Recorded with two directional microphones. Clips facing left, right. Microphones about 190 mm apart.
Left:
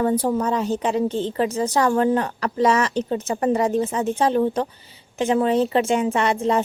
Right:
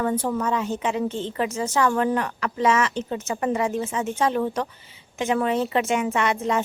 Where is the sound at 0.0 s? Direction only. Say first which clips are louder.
Left 4 dB; 30° left (ahead or behind).